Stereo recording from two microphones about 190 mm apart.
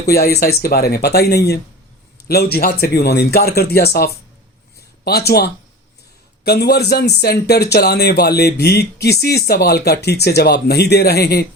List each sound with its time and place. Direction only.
0.0 s speech: 55° left (ahead or behind)